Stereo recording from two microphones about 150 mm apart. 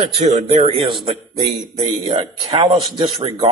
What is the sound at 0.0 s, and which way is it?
Speech, 45° right (ahead or behind).